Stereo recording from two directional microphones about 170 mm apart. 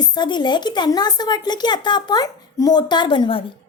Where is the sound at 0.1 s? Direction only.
25° left (ahead or behind).